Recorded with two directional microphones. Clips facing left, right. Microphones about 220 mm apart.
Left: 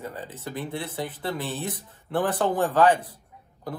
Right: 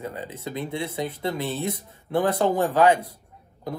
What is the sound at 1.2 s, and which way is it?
Speech, 10° right (ahead or behind).